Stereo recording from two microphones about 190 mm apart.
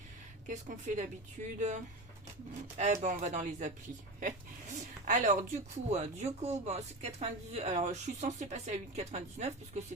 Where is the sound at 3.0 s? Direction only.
40° right (ahead or behind).